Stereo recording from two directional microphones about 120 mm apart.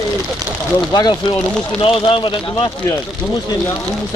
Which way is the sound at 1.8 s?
45° left (ahead or behind).